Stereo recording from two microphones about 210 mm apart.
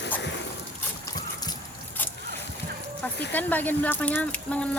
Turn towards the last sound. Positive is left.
turn(degrees=5)  # may be behind; listen again after turning